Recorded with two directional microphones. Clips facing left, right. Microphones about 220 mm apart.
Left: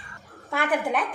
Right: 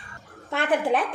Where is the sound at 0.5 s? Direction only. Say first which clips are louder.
Right 2 dB; 30° right (ahead or behind).